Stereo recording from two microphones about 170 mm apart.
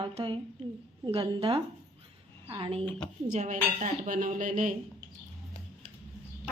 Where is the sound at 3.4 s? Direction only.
45° right (ahead or behind).